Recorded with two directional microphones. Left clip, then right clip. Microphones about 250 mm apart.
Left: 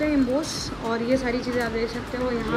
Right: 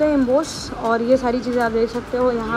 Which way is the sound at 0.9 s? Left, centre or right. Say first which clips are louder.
Right 7 dB; centre.